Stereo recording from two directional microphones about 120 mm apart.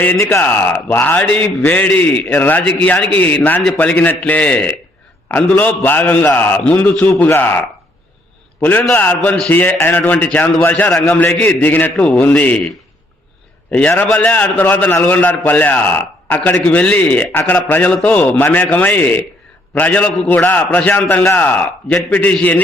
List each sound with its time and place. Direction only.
0.0 s a man's voice: 20° left (ahead or behind)
8.6 s a man's voice: 15° left (ahead or behind)
13.7 s a man's voice: 10° left (ahead or behind)